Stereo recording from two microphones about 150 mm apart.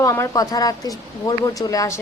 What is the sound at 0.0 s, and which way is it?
A woman's voice, 20° left (ahead or behind).